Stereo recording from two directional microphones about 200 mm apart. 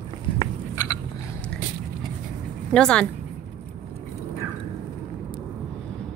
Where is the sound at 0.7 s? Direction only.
15° left (ahead or behind).